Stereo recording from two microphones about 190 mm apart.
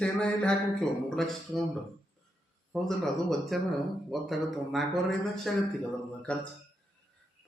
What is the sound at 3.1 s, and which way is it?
Speech, centre (ahead or behind).